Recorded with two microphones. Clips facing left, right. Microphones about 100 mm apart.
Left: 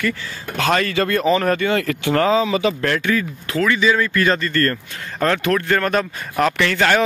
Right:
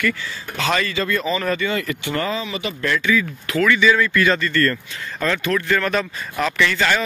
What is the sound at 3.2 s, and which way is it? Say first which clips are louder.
Speech: even; 30° left (ahead or behind).